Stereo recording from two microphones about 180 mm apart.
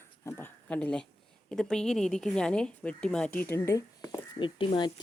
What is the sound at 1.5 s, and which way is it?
Speech, 5° left (ahead or behind).